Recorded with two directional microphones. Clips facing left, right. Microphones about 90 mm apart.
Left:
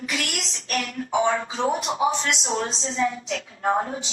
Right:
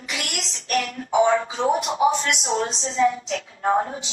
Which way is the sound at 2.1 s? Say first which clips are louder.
Right 2 dB; 30° left (ahead or behind).